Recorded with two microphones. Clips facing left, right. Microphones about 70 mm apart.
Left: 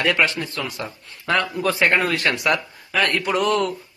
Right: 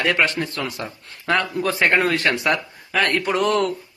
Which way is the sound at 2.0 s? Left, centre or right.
Right.